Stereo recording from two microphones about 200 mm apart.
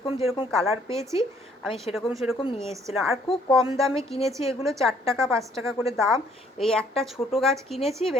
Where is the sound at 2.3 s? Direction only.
25° left (ahead or behind).